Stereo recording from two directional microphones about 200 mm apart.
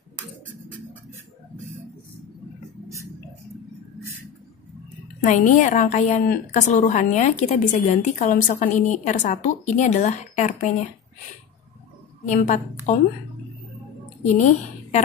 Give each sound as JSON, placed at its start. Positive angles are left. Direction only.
{"t": 5.2, "sound": "a woman's voice", "side_deg": 40}
{"t": 12.3, "sound": "a woman's voice", "side_deg": 40}
{"t": 14.2, "sound": "a woman's voice", "side_deg": 35}